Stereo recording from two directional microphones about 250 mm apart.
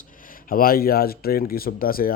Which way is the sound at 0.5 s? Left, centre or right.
Left.